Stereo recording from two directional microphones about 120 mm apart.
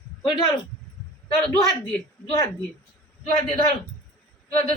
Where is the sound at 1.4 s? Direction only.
30° left (ahead or behind).